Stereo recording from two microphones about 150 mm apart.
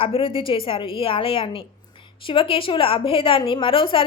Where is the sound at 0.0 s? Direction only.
40° left (ahead or behind).